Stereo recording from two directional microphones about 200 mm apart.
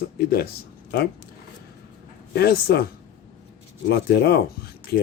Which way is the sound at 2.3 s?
50° left (ahead or behind).